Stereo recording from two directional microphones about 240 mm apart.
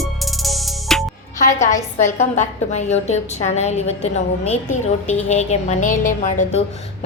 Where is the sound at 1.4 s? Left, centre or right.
Left.